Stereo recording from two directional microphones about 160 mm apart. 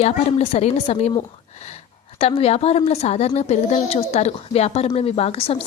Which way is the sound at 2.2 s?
40° left (ahead or behind).